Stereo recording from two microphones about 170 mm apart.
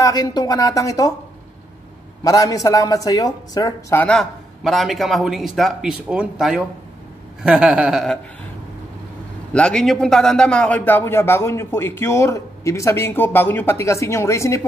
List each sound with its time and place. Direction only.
0.0 s speech: 25° left (ahead or behind)
2.2 s speech: 20° left (ahead or behind)
4.0 s a man's voice: 5° left (ahead or behind)
9.5 s a man's voice: 5° left (ahead or behind)